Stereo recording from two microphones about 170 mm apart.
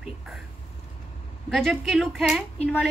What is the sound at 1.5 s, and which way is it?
Speech, centre (ahead or behind).